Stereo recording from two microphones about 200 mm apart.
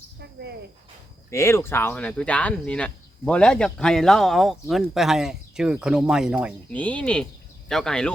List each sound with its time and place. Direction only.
1.3 s speech: 15° left (ahead or behind); by 6.5 s 5° right (ahead or behind)
6.7 s speech: 5° left (ahead or behind)